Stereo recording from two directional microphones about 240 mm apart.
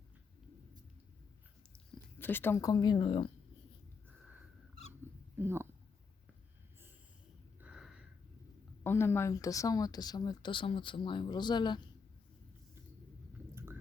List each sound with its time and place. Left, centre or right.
2.1 s speech: centre
5.4 s speech: centre
7.6 s a sound: centre
8.8 s speech: centre